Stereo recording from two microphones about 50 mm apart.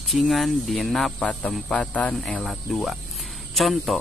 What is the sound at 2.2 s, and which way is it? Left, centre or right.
Speech, centre.